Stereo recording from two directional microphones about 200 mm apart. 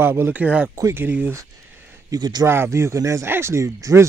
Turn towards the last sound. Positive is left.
turn(degrees=-15)  # may be behind; listen again after turning